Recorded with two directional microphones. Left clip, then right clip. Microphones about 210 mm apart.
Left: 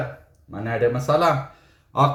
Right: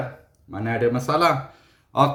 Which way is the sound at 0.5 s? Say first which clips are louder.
Left 1 dB; 50° right (ahead or behind).